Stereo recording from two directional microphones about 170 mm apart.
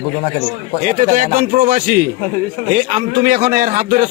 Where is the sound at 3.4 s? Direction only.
55° right (ahead or behind).